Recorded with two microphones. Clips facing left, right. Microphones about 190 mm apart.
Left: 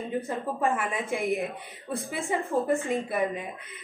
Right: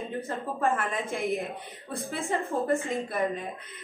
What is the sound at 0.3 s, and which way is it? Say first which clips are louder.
A woman's voice: right 1 dB; 15° left (ahead or behind).